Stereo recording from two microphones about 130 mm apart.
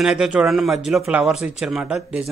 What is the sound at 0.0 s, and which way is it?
Speech, 5° right (ahead or behind).